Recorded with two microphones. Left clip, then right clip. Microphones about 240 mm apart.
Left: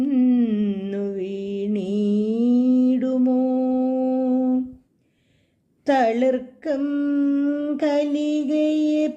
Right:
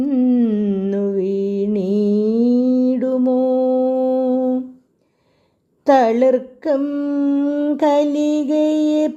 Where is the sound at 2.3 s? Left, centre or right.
Right.